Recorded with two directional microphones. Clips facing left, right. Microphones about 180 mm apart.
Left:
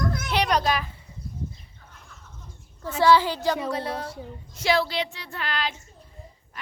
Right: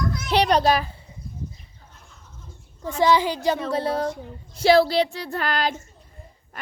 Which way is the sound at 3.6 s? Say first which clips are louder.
Right 5 dB; 30° right (ahead or behind).